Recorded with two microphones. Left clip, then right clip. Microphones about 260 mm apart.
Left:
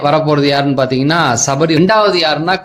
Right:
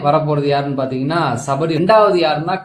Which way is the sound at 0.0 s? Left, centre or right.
Left.